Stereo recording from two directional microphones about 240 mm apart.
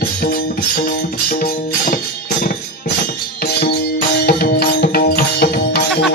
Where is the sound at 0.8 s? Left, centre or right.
Left.